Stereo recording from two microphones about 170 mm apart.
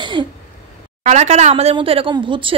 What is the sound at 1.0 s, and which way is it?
A woman's voice, 40° right (ahead or behind).